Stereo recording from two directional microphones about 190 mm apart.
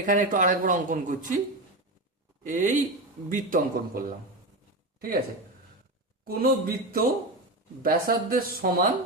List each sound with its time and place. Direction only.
0.0 s speech: 45° right (ahead or behind)
2.4 s a man's voice: 40° right (ahead or behind)
6.2 s speech: 50° right (ahead or behind)